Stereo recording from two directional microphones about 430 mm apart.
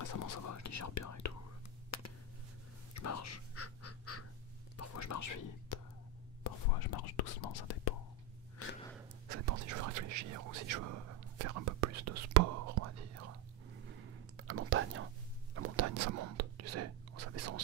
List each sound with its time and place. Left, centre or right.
0.0 s whispering: left
1.9 s a sound: left
4.7 s whispering: left
6.4 s whispering: left
9.5 s whispering: right
14.3 s whispering: right